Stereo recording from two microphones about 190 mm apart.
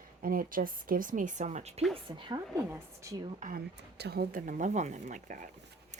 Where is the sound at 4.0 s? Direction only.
55° right (ahead or behind).